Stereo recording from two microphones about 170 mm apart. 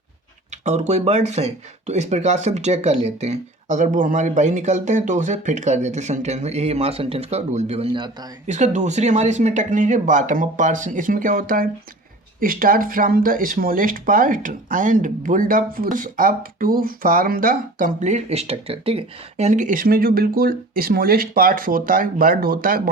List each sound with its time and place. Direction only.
0.5 s speech: 40° right (ahead or behind)
7.9 s speech: 25° right (ahead or behind)
8.4 s speech: 45° right (ahead or behind)